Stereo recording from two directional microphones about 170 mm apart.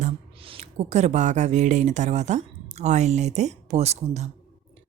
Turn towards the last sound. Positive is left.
turn(degrees=-40)  # may be behind; listen again after turning